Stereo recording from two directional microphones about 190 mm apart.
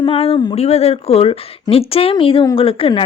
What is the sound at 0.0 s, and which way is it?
A woman's voice, 30° left (ahead or behind).